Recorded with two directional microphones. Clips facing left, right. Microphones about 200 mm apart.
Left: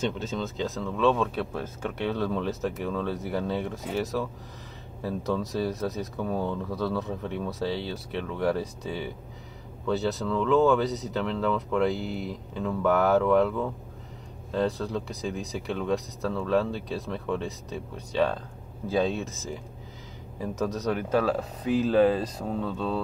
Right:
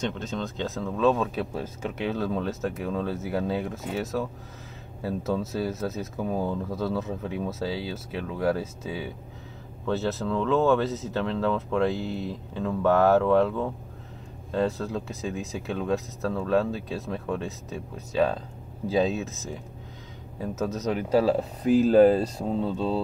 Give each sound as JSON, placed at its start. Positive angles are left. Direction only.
{"t": 0.2, "sound": "speech", "side_deg": 5}
{"t": 14.5, "sound": "speech", "side_deg": 0}
{"t": 21.2, "sound": "speech", "side_deg": -30}
{"t": 22.1, "sound": "mantra", "side_deg": -30}